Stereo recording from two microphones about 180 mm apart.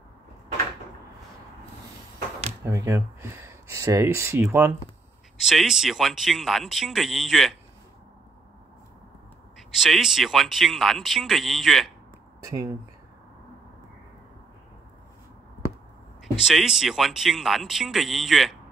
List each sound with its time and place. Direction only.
2.6 s speech: 15° right (ahead or behind)
5.4 s speech: centre (ahead or behind)
9.6 s speech: centre (ahead or behind)
12.4 s speech: 20° right (ahead or behind)
16.3 s speech: 5° right (ahead or behind)